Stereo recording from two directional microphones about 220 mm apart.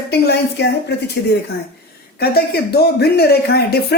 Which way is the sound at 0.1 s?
50° left (ahead or behind).